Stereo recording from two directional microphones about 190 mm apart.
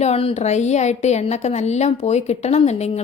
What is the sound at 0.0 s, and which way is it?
A woman's voice, 30° left (ahead or behind).